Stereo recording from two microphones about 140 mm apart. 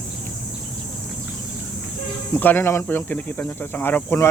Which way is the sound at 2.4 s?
15° left (ahead or behind).